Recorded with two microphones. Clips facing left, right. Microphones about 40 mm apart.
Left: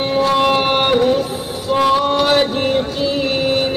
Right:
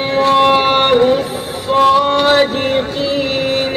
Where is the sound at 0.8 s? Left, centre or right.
Right.